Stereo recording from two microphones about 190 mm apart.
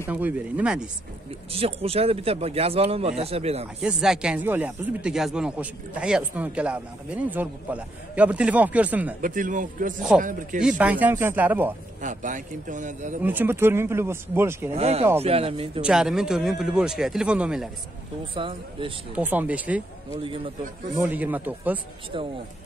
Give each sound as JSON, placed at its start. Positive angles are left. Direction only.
{"t": 0.1, "sound": "speech", "side_deg": -10}
{"t": 1.5, "sound": "speech", "side_deg": -30}
{"t": 3.8, "sound": "speech", "side_deg": -5}
{"t": 9.2, "sound": "speech", "side_deg": -45}
{"t": 10.6, "sound": "speech", "side_deg": -5}
{"t": 12.0, "sound": "speech", "side_deg": -40}
{"t": 13.2, "sound": "speech", "side_deg": -10}
{"t": 14.8, "sound": "speech", "side_deg": -30}
{"t": 15.8, "sound": "speech", "side_deg": -5}
{"t": 18.3, "sound": "speech", "side_deg": -25}
{"t": 19.1, "sound": "speech", "side_deg": -10}
{"t": 21.0, "sound": "speech", "side_deg": -10}